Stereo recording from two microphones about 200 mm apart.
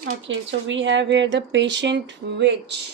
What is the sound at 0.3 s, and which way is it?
Speech, 70° right (ahead or behind).